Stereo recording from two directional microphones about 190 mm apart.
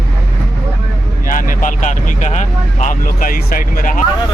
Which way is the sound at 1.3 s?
45° left (ahead or behind).